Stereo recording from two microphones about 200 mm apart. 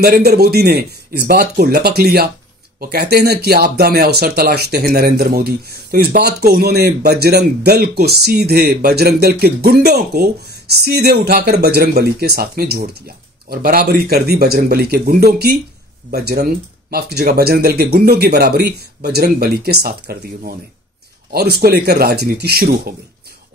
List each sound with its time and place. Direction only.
0.0 s speech: 50° right (ahead or behind)